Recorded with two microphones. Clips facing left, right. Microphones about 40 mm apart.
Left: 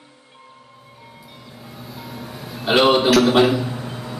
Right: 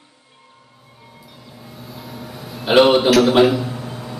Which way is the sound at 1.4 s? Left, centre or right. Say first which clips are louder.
Even; centre.